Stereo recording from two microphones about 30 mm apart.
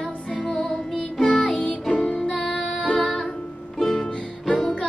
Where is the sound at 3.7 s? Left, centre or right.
Centre.